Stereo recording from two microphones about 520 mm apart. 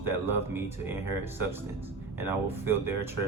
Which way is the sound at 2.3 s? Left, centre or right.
Centre.